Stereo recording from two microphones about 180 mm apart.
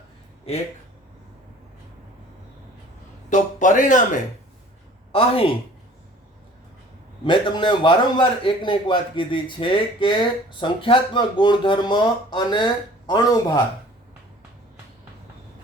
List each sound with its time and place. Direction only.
0.5 s a woman's voice: 35° left (ahead or behind)
3.2 s speech: 45° left (ahead or behind)
5.1 s a woman's voice: 30° left (ahead or behind)
7.3 s a man's voice: 25° left (ahead or behind)